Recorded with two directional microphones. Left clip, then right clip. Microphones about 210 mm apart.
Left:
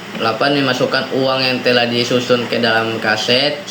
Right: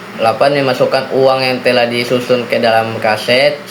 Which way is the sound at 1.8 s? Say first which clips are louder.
Right 3 dB; 45° right (ahead or behind).